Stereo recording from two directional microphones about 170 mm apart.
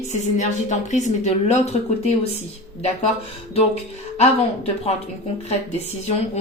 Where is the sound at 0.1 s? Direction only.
45° left (ahead or behind).